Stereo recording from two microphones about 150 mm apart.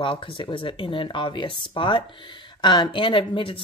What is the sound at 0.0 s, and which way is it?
Speech, 35° left (ahead or behind).